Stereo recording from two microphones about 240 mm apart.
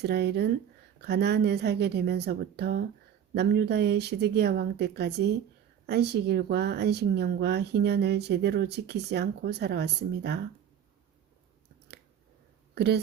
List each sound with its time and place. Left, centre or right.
0.0 s speech: right
12.7 s speech: right